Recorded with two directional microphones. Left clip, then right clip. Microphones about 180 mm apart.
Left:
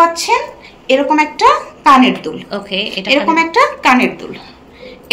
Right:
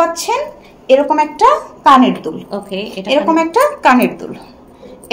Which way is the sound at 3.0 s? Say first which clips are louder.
Even; 40° right (ahead or behind).